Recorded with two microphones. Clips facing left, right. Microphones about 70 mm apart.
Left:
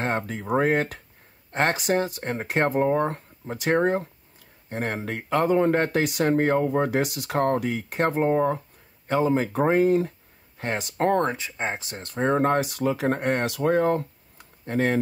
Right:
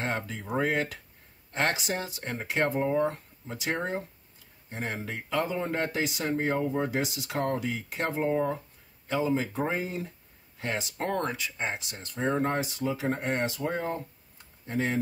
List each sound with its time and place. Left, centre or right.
0.0 s speech: left
11.1 s speech: left
11.8 s speech: left